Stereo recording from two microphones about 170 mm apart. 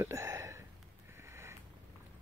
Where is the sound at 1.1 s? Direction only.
15° right (ahead or behind).